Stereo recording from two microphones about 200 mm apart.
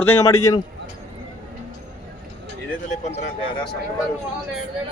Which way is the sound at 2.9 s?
35° left (ahead or behind).